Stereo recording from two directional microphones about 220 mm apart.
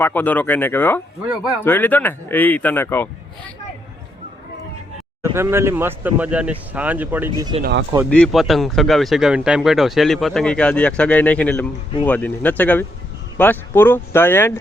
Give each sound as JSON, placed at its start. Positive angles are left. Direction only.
{"t": 0.0, "sound": "speech", "side_deg": 10}
{"t": 5.2, "sound": "speech", "side_deg": -10}
{"t": 7.3, "sound": "speech", "side_deg": -20}
{"t": 7.6, "sound": "speech", "side_deg": -50}
{"t": 8.1, "sound": "speech", "side_deg": 0}